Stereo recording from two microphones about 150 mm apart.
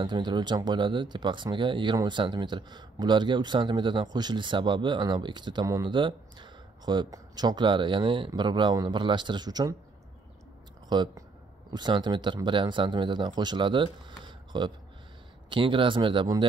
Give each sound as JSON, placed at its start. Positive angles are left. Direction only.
{"t": 0.0, "sound": "speech", "side_deg": -30}
{"t": 10.9, "sound": "speech", "side_deg": -30}